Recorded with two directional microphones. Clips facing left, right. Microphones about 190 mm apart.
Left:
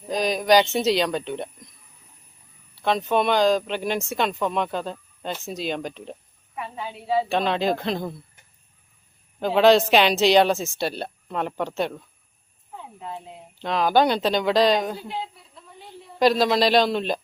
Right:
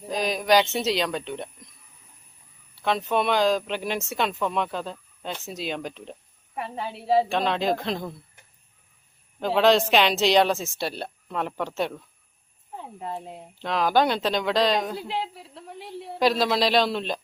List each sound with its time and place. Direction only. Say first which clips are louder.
0.1 s speech: left 3 dB; centre (ahead or behind)
2.8 s speech: left 2 dB; centre (ahead or behind)
6.6 s a woman's voice: right 1 dB; 40° right (ahead or behind)
7.3 s speech: left 2 dB; centre (ahead or behind)
9.4 s speech: left 3 dB; centre (ahead or behind)
13.0 s a woman's voice: right 2 dB; 40° right (ahead or behind)
13.6 s speech: left 2 dB; centre (ahead or behind)
14.9 s a sound: right 2 dB; 75° right (ahead or behind)
16.1 s speech: left 3 dB; centre (ahead or behind)